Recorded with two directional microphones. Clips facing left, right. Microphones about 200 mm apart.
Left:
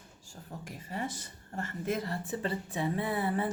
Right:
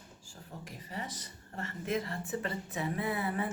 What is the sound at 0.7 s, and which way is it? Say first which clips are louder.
Speech: left 5 dB; 50° left (ahead or behind).